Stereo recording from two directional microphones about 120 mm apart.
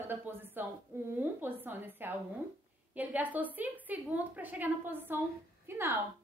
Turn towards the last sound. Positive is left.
turn(degrees=-20)  # may be behind; listen again after turning